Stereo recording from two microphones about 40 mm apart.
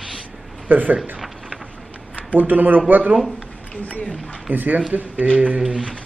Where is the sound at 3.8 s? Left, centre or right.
Left.